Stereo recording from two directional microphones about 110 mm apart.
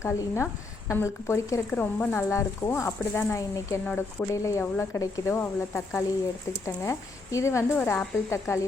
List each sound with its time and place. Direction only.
0.0 s speech: 25° left (ahead or behind)
1.7 s speech: 15° left (ahead or behind)
3.8 s speech: 15° left (ahead or behind)
4.3 s speech: 25° left (ahead or behind)